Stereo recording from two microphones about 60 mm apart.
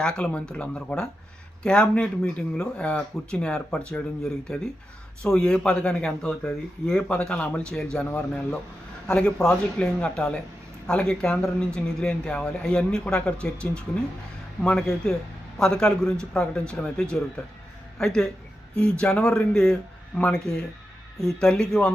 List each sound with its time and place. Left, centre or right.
0.0 s speech: centre
21.2 s speech: centre